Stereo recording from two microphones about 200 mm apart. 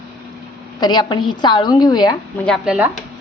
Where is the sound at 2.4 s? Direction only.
Centre (ahead or behind).